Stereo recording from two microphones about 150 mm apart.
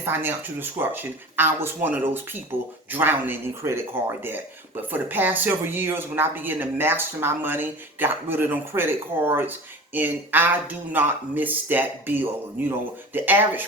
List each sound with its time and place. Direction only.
0.0 s speech: 15° right (ahead or behind)